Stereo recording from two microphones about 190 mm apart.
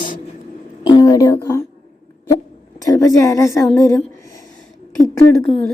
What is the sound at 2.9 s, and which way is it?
Speech, 15° left (ahead or behind).